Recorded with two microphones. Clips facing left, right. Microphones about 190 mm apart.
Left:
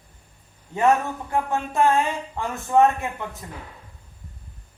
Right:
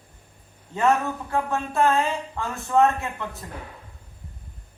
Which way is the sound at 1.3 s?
15° left (ahead or behind).